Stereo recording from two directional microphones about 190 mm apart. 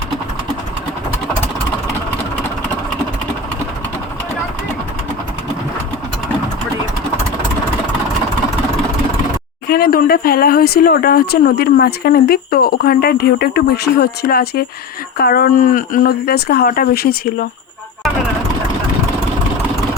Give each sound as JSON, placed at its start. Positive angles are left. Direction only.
{"t": 9.6, "sound": "speech", "side_deg": 55}